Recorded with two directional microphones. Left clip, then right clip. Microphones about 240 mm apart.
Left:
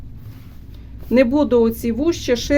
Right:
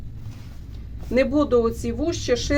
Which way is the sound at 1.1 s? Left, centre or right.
Left.